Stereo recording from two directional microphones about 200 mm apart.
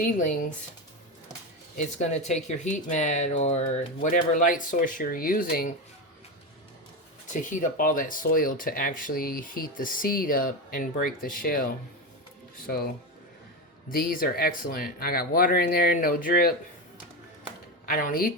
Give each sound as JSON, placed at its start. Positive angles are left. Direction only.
{"t": 0.0, "sound": "speech", "side_deg": 40}
{"t": 1.7, "sound": "speech", "side_deg": 35}
{"t": 7.5, "sound": "speech", "side_deg": 40}
{"t": 13.9, "sound": "speech", "side_deg": 45}
{"t": 17.8, "sound": "speech", "side_deg": 45}